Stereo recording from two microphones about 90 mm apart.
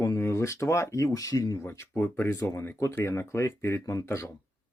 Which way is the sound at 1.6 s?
30° left (ahead or behind).